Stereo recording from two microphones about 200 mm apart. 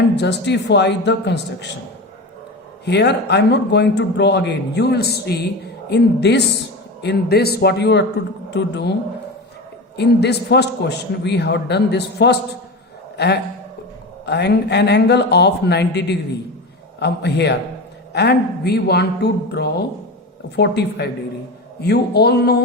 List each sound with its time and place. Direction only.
0.2 s a man's voice: 60° left (ahead or behind)
2.8 s a man's voice: 55° left (ahead or behind)
10.0 s a man's voice: 55° left (ahead or behind)